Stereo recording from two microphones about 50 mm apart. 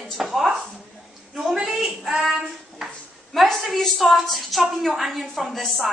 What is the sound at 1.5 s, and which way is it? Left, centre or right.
Speech, centre.